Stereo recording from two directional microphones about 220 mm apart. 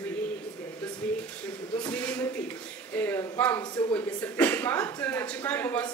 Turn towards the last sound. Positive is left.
turn(degrees=5)  # may be behind; listen again after turning